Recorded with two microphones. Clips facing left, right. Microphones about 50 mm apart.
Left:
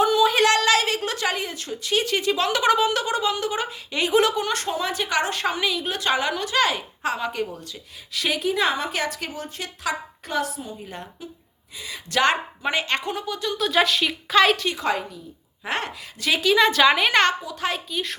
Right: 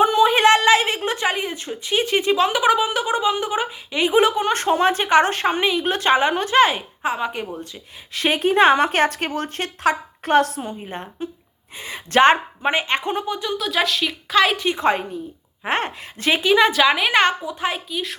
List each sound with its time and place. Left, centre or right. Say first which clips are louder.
0.0 s a woman's voice: right 3 dB; right
4.7 s a woman's voice: right 12 dB; right
8.1 s a woman's voice: right 6 dB; right
10.8 s a woman's voice: right 6 dB; right
13.6 s speech: left 3 dB; centre
14.5 s speech: right 3 dB; centre
14.8 s a woman's voice: right 5 dB; right
16.7 s a woman's voice: right 1 dB; centre